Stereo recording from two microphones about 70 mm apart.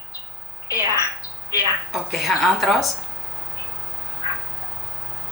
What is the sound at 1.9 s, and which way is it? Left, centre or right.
Speech, centre.